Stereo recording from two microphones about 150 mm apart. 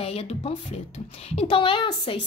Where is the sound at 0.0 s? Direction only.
40° left (ahead or behind).